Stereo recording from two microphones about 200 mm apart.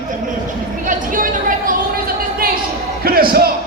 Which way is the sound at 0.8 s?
40° right (ahead or behind).